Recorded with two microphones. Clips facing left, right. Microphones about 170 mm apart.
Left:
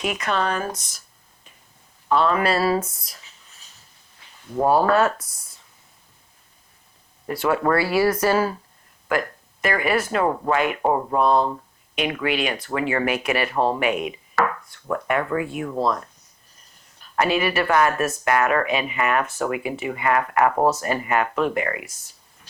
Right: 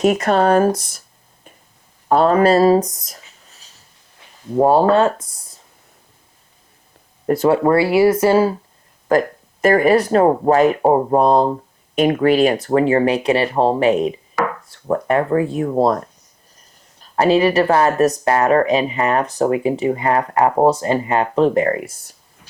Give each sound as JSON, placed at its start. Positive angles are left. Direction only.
{"t": 0.0, "sound": "speech", "side_deg": -45}
{"t": 0.8, "sound": "speech", "side_deg": -55}
{"t": 2.0, "sound": "speech", "side_deg": -40}
{"t": 4.5, "sound": "speech", "side_deg": -30}
{"t": 7.4, "sound": "speech", "side_deg": -25}
{"t": 9.0, "sound": "speech", "side_deg": -40}
{"t": 14.4, "sound": "chopping", "side_deg": -15}
{"t": 14.7, "sound": "speech", "side_deg": -35}
{"t": 15.8, "sound": "speech", "side_deg": -45}
{"t": 17.0, "sound": "speech", "side_deg": -30}